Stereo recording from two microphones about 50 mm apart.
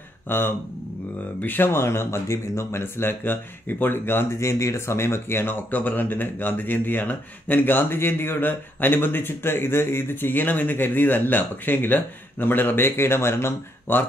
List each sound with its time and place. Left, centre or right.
0.3 s speech: left
1.7 s speech: left
4.4 s speech: left
13.9 s speech: left